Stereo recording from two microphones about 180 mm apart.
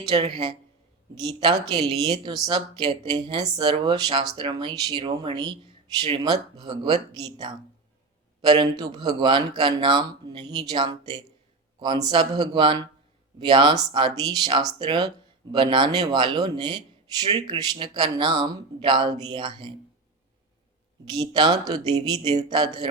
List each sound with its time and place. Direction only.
0.1 s speech: 30° right (ahead or behind)
8.4 s speech: 25° right (ahead or behind)
21.1 s speech: 25° right (ahead or behind)